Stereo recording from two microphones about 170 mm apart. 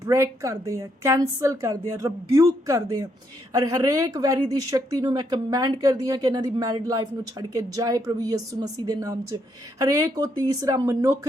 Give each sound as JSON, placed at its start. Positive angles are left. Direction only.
{"t": 0.0, "sound": "speech", "side_deg": -20}